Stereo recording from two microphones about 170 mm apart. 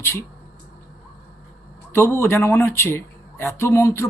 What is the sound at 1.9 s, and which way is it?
Speech, 15° left (ahead or behind).